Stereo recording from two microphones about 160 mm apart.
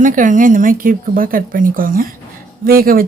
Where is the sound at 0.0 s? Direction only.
55° right (ahead or behind).